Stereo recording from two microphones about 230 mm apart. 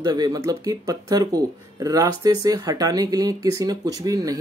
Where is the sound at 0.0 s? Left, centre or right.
Centre.